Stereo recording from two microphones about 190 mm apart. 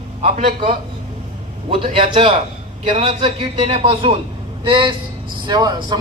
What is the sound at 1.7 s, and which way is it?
A man's voice, 25° right (ahead or behind).